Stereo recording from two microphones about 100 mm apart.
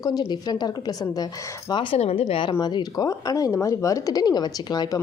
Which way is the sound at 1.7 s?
60° left (ahead or behind).